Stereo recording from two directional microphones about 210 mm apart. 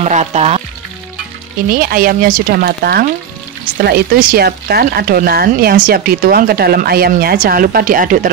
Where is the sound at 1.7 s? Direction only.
45° right (ahead or behind).